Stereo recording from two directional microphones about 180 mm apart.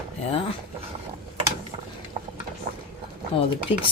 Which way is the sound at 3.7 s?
10° right (ahead or behind).